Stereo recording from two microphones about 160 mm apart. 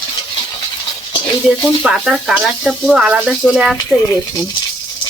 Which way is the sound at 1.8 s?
5° right (ahead or behind).